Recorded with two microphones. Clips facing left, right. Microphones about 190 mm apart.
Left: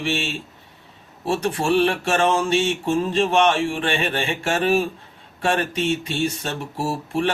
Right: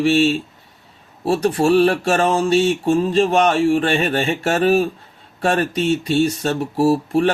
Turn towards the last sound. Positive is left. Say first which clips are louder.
# right 7 dB
turn(degrees=-40)  # may be behind; listen again after turning